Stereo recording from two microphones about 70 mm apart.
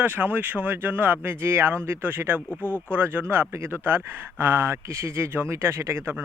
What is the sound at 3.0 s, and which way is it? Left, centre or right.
Speech, right.